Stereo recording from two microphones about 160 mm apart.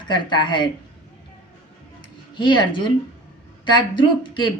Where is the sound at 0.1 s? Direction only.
30° left (ahead or behind).